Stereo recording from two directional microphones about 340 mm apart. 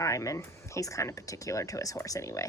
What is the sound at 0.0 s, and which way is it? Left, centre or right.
Speech, centre.